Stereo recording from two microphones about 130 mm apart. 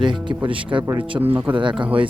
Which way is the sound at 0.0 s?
40° right (ahead or behind).